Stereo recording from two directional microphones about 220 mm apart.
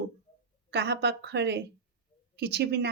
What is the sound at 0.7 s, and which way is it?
Speech, 50° right (ahead or behind).